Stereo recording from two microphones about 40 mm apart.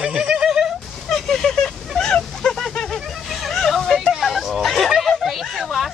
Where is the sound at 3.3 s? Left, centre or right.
Centre.